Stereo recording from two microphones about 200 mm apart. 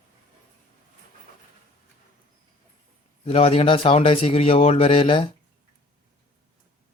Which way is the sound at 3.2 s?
30° left (ahead or behind).